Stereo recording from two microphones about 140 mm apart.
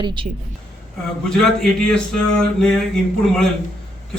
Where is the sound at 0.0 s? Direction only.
35° right (ahead or behind).